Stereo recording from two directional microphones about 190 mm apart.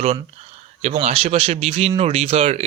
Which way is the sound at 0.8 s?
35° right (ahead or behind).